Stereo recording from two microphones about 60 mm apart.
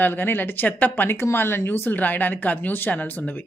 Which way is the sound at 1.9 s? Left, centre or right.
Left.